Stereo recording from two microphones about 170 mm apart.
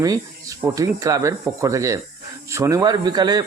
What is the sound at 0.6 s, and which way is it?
Speech, 20° right (ahead or behind).